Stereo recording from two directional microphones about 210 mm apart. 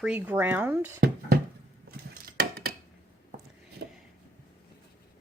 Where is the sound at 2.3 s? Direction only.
50° right (ahead or behind).